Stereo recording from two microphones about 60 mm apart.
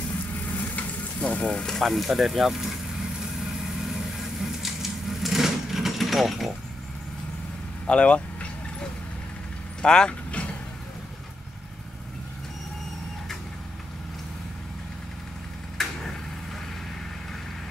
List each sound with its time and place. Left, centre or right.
0.6 s frying: left
1.4 s speech: centre
1.8 s speech: centre
4.2 s a sound: centre
7.8 s vehicle: centre
9.8 s speech: centre
15.8 s a sound: centre